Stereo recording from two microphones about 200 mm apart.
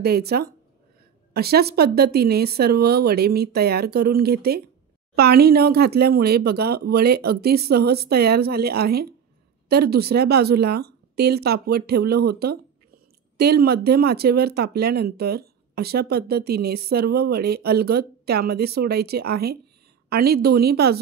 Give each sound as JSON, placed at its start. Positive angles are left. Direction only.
{"t": 0.0, "sound": "speech", "side_deg": -50}